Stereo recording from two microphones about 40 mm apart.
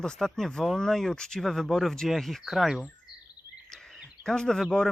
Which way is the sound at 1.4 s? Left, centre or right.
Centre.